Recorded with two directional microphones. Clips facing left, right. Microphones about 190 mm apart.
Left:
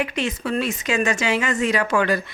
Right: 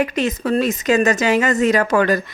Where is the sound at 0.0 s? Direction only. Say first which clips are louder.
Right 5 dB; 40° right (ahead or behind).